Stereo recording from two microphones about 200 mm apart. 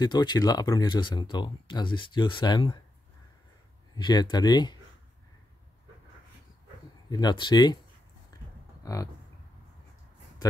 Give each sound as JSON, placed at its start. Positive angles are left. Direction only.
{"t": 0.0, "sound": "speech", "side_deg": 20}
{"t": 3.9, "sound": "speech", "side_deg": 20}
{"t": 7.1, "sound": "speech", "side_deg": 20}
{"t": 8.3, "sound": "a sound", "side_deg": 20}